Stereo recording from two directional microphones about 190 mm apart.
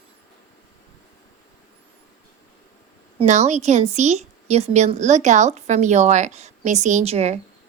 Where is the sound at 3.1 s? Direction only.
35° right (ahead or behind).